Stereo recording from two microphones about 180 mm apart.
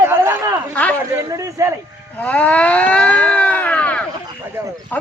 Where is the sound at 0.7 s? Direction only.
10° left (ahead or behind).